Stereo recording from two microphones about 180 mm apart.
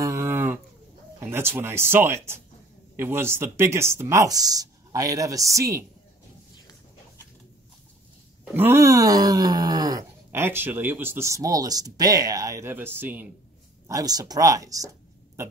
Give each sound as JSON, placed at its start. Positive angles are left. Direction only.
{"t": 0.0, "sound": "livestock", "side_deg": -15}
{"t": 1.2, "sound": "groan", "side_deg": -15}
{"t": 8.5, "sound": "groan", "side_deg": -10}
{"t": 13.8, "sound": "speech", "side_deg": -20}